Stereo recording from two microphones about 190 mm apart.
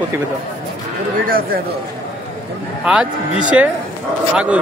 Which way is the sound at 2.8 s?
5° right (ahead or behind).